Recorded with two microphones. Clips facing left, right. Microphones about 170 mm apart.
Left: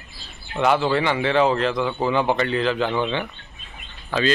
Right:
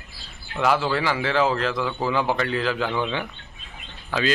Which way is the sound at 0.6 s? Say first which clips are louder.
Left 3 dB; centre (ahead or behind).